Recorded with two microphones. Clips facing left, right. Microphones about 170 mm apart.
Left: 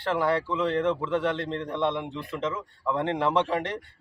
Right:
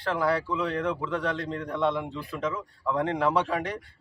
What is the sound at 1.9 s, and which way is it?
A man's voice, centre (ahead or behind).